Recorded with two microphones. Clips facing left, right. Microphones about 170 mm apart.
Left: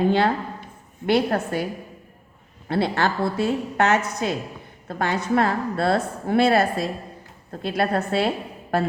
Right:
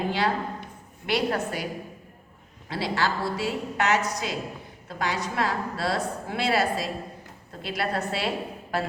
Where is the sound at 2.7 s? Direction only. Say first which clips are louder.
Left 5 dB; 60° left (ahead or behind).